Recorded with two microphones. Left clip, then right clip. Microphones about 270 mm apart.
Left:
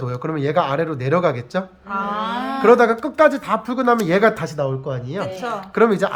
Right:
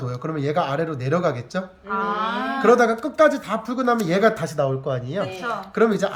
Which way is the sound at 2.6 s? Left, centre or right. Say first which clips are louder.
Left 4 dB; centre.